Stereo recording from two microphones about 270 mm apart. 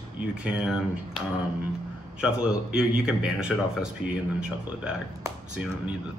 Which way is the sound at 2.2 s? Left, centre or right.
Centre.